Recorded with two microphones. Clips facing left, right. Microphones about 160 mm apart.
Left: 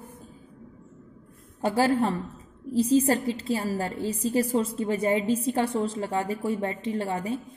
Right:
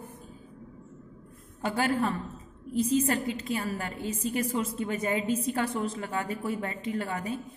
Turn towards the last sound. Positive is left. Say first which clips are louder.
# left 3 dB
turn(degrees=30)  # may be behind; listen again after turning